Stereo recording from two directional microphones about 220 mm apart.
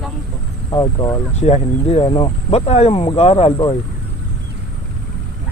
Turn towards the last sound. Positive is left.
turn(degrees=25)  # may be behind; listen again after turning